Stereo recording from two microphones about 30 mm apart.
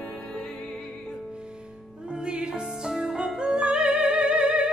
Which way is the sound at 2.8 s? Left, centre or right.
Centre.